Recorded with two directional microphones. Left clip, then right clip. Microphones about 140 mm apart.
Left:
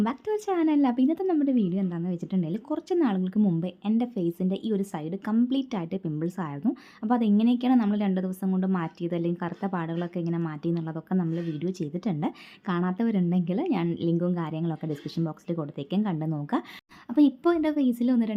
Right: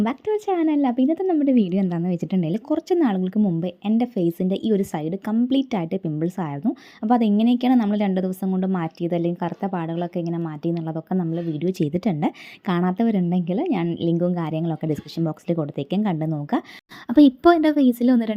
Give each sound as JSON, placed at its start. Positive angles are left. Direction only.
{"t": 0.0, "sound": "a woman's voice", "side_deg": -25}
{"t": 17.1, "sound": "a woman's voice", "side_deg": -45}